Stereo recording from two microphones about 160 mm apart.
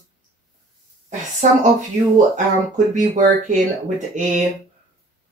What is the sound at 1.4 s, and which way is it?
Speech, 50° right (ahead or behind).